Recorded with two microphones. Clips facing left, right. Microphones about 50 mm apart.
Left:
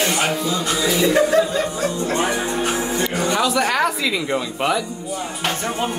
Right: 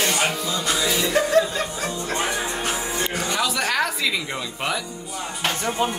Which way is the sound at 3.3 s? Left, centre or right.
Centre.